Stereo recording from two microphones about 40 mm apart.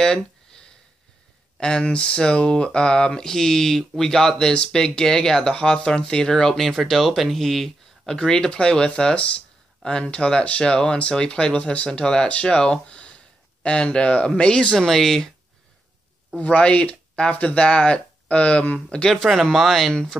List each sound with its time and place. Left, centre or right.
0.0 s a sound: centre
1.6 s speech: left
6.5 s speech: centre
8.5 s speech: left; by 15.3 s centre
16.3 s speech: left
19.2 s speech: centre
19.9 s speech: centre